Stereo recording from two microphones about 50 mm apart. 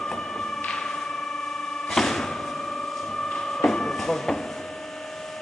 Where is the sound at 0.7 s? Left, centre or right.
Centre.